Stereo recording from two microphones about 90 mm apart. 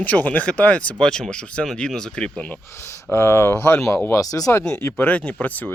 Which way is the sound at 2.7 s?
25° left (ahead or behind).